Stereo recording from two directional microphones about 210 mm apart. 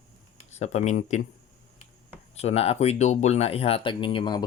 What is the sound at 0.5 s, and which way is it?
Speech, 30° left (ahead or behind).